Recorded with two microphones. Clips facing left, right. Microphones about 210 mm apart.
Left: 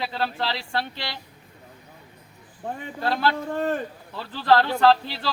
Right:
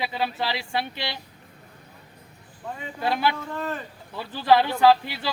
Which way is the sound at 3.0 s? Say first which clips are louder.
Even; 15° right (ahead or behind).